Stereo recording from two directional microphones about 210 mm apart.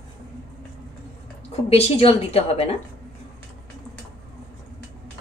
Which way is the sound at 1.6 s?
30° left (ahead or behind).